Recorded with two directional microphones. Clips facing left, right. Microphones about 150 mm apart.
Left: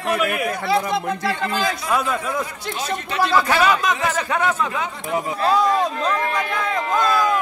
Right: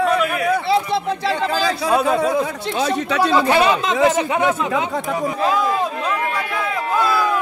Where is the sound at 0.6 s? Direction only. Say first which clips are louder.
Right 2 dB; 30° right (ahead or behind).